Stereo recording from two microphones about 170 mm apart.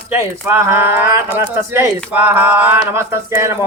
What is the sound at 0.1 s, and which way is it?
Speech, 15° right (ahead or behind).